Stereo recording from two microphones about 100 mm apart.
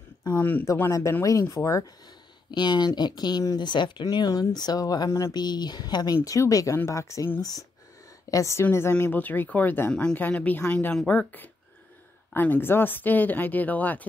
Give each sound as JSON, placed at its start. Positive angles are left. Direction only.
{"t": 0.4, "sound": "speech", "side_deg": 20}
{"t": 1.5, "sound": "speech", "side_deg": 35}
{"t": 2.5, "sound": "speech", "side_deg": 50}
{"t": 6.2, "sound": "speech", "side_deg": 35}